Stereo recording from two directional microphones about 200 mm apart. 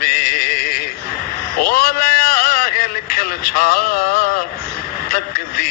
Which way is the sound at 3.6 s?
45° left (ahead or behind).